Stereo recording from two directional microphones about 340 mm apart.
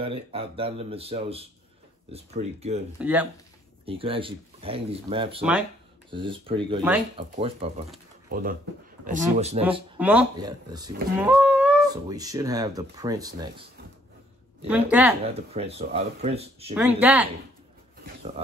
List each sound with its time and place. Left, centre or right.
0.0 s speech: centre
3.0 s speech: centre
3.8 s speech: centre
9.9 s speech: centre
14.7 s speech: centre
15.3 s speech: centre
16.7 s speech: centre
18.0 s a sound: centre